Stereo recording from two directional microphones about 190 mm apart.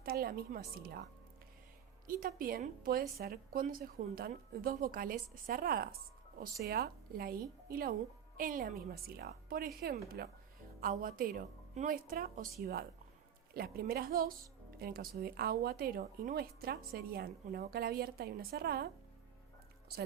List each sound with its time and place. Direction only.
0.0 s speech: 50° right (ahead or behind)
2.0 s speech: 50° right (ahead or behind)